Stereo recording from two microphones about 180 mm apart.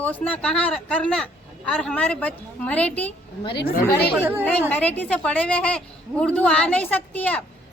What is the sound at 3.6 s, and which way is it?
Speech, 60° left (ahead or behind).